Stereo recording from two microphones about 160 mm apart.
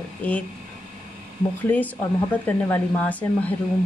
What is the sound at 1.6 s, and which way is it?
Speech, 10° left (ahead or behind).